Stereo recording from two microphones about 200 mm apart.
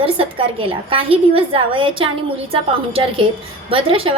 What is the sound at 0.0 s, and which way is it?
A woman's voice, 25° right (ahead or behind).